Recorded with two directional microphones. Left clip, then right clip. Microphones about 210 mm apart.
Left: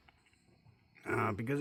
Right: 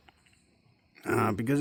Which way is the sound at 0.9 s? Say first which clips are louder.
Right 6 dB; 55° right (ahead or behind).